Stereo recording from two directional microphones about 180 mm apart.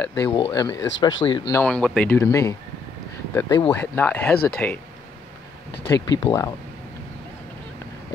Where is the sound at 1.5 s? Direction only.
10° left (ahead or behind).